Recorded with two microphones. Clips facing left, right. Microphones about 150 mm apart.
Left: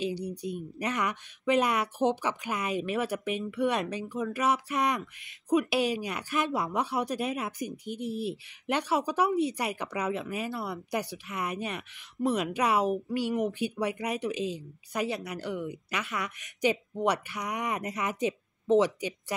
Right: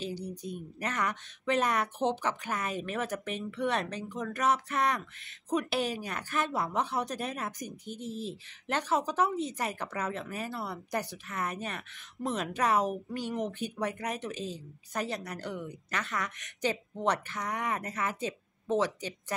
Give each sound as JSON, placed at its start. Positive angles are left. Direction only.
{"t": 0.0, "sound": "a woman's voice", "side_deg": 15}